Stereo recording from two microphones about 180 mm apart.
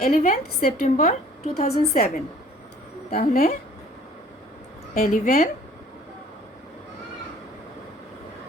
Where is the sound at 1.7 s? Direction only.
35° left (ahead or behind).